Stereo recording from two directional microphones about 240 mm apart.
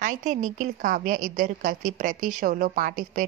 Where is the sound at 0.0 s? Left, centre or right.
Right.